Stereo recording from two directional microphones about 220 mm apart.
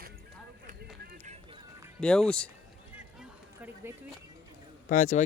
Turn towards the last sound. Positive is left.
turn(degrees=35)  # may be behind; listen again after turning